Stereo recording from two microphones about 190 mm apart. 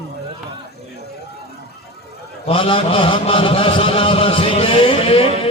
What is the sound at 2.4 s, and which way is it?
Mantra, 30° left (ahead or behind).